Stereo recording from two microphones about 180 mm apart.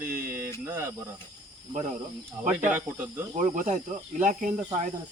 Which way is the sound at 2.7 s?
10° right (ahead or behind).